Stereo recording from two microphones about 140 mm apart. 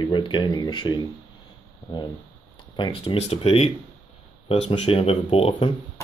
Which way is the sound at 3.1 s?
45° left (ahead or behind).